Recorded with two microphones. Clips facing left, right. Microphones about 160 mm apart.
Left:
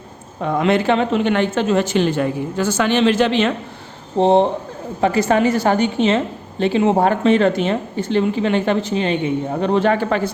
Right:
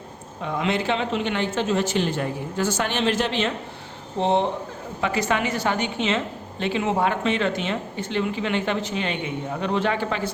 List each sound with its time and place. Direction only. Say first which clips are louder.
0.4 s a woman's voice: left 8 dB; 50° left (ahead or behind); by 3.5 s 75° left (ahead or behind)
4.2 s a woman's voice: left 8 dB; 35° left (ahead or behind)